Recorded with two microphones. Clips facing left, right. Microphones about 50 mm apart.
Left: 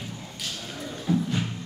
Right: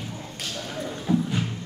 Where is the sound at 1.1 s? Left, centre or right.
Centre.